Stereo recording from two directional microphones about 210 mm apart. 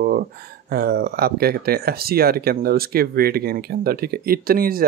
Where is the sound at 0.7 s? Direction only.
45° right (ahead or behind).